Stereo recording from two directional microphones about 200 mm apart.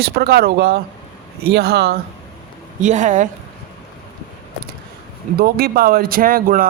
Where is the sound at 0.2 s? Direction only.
50° right (ahead or behind).